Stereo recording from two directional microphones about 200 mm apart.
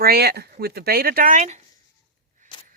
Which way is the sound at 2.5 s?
25° left (ahead or behind).